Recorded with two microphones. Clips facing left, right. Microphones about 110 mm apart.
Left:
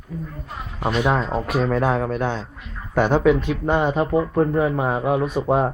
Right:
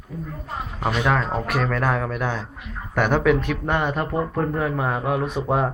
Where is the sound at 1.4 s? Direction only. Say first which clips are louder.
Left 2 dB; 70° right (ahead or behind).